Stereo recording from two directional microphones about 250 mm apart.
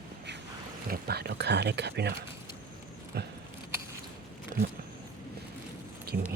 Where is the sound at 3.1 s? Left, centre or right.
Right.